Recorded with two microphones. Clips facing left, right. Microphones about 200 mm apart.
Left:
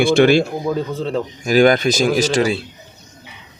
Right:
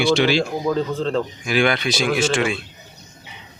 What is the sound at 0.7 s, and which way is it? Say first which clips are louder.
Speech: right 1 dB; 10° left (ahead or behind).